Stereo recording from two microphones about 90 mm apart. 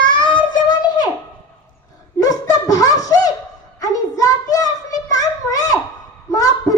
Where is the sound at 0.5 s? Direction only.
50° left (ahead or behind).